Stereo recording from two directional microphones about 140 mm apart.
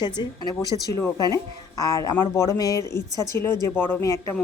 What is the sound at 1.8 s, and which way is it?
A woman's voice, 25° left (ahead or behind).